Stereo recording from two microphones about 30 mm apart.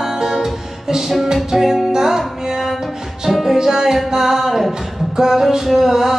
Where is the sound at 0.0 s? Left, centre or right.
Centre.